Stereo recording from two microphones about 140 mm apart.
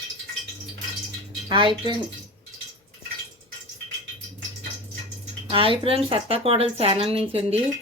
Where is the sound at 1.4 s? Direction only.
35° right (ahead or behind).